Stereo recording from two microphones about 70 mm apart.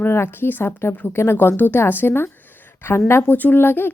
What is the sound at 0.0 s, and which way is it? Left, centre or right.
Speech, left.